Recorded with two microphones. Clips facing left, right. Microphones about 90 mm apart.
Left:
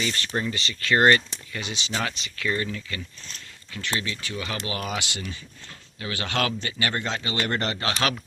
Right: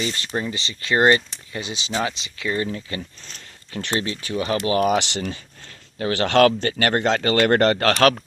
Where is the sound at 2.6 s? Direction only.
30° right (ahead or behind).